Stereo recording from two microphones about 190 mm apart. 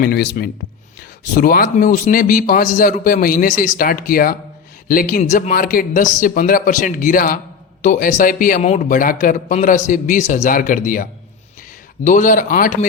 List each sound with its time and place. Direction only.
0.0 s a man's voice: 55° left (ahead or behind)